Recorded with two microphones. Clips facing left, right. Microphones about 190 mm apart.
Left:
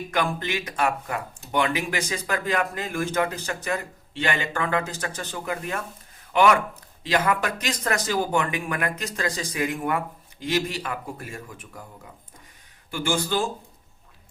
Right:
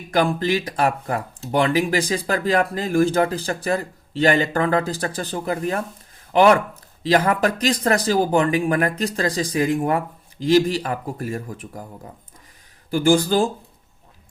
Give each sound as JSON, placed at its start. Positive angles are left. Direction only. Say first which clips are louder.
{"t": 0.1, "sound": "speech", "louder": "right 8 dB", "side_deg": -35}
{"t": 12.9, "sound": "speech", "louder": "right 8 dB", "side_deg": -35}